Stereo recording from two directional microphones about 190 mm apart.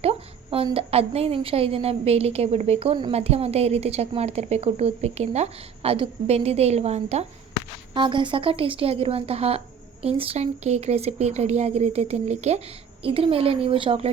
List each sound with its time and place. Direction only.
0.0 s a woman's voice: 30° right (ahead or behind)